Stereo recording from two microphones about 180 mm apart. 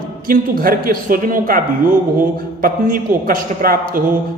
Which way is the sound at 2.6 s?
50° right (ahead or behind).